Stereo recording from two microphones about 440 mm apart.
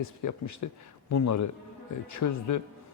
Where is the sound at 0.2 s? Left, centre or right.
Left.